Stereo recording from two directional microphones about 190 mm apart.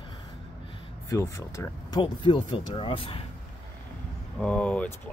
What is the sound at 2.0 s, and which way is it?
Speech, 25° left (ahead or behind).